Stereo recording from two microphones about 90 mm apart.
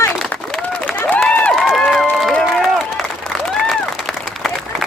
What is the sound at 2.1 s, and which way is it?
Run, centre (ahead or behind).